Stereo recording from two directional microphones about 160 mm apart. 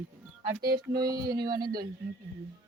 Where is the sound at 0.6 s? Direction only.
75° right (ahead or behind).